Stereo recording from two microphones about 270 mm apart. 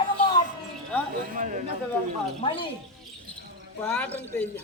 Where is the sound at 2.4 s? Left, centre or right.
Centre.